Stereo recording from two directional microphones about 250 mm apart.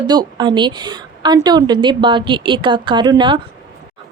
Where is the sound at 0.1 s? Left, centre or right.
Centre.